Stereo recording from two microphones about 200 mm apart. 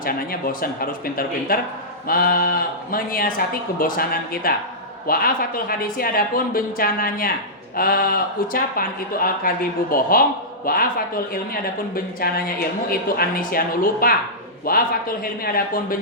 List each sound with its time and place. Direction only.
0.0 s speech: 45° left (ahead or behind)